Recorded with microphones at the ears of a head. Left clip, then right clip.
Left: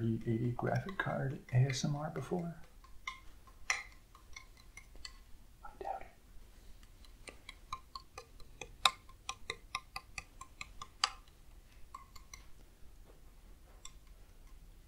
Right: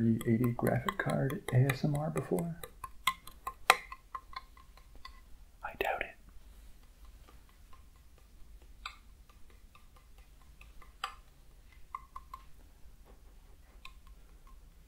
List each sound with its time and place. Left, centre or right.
0.0 s dishes: right
5.6 s whispering: right
7.2 s tick-tock: left
11.9 s a sound: right